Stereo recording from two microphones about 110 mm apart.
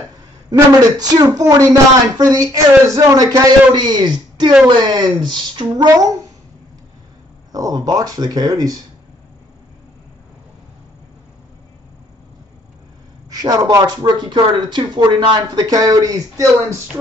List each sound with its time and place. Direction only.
0.5 s speech: 40° right (ahead or behind)
7.5 s speech: 35° right (ahead or behind)
13.3 s speech: 35° right (ahead or behind)